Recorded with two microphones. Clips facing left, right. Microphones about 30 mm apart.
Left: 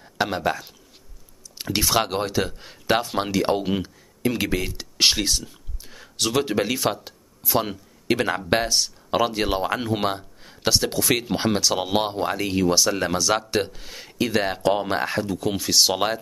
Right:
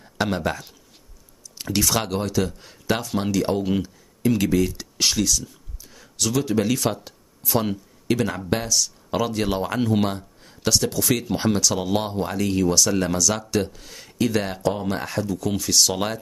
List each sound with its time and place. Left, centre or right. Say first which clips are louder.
0.0 s speech: even; centre
1.6 s speech: left 1 dB; left
8.1 s speech: left 2 dB; left
9.9 s a sound: right 1 dB; left
10.9 s speech: even; left
14.6 s speech: left 3 dB; left